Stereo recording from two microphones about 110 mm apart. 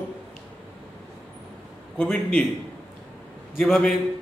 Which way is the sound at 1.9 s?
10° left (ahead or behind).